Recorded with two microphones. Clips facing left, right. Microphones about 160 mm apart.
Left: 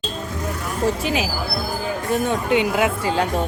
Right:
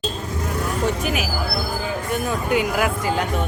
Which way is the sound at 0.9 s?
30° left (ahead or behind).